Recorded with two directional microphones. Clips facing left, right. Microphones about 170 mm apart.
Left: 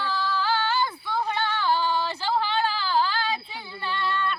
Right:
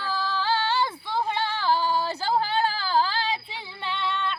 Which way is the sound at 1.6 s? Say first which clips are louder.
Right 1 dB; 40° right (ahead or behind).